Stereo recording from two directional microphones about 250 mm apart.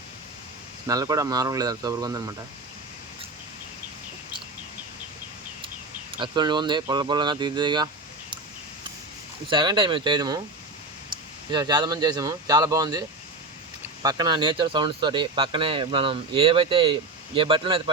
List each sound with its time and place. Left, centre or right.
0.9 s speech: centre
6.1 s speech: centre
9.5 s speech: centre
11.5 s speech: centre